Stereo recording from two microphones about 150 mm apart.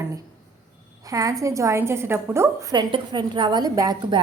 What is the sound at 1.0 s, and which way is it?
A woman's voice, 25° right (ahead or behind).